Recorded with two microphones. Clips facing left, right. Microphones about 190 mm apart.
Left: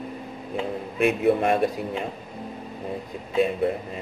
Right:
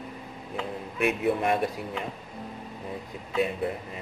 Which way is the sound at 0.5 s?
25° left (ahead or behind).